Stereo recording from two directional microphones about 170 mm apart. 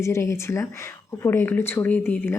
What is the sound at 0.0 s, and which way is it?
Speech, 15° left (ahead or behind).